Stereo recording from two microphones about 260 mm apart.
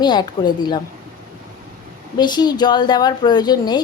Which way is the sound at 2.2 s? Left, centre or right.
Centre.